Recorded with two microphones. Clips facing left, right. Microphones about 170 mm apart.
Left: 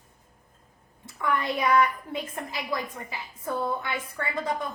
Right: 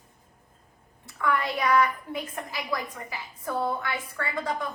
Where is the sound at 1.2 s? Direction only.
20° left (ahead or behind).